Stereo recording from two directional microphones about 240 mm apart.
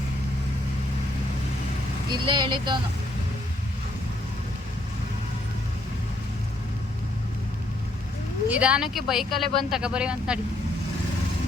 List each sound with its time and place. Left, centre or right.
2.0 s speech: centre
8.4 s speech: centre